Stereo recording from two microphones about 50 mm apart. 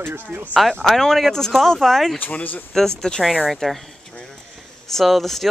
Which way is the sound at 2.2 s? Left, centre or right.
Left.